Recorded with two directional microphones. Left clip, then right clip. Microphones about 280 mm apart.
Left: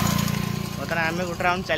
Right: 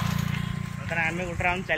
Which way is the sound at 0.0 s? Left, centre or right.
Left.